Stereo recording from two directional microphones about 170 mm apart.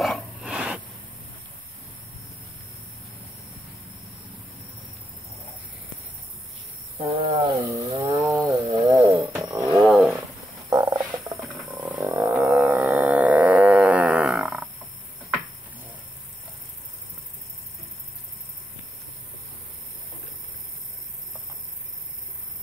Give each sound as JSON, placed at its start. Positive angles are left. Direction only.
{"t": 0.0, "sound": "dog", "side_deg": 0}
{"t": 7.0, "sound": "cricket", "side_deg": -30}
{"t": 7.7, "sound": "wild animals", "side_deg": -25}
{"t": 8.4, "sound": "a sound", "side_deg": -25}
{"t": 9.6, "sound": "a sound", "side_deg": 0}
{"t": 10.7, "sound": "frog", "side_deg": -20}
{"t": 11.5, "sound": "frog", "side_deg": -5}
{"t": 12.1, "sound": "music", "side_deg": -10}